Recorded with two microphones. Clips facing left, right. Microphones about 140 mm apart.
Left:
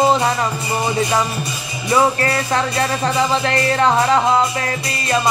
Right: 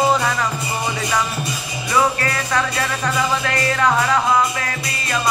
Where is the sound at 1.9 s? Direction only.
25° left (ahead or behind).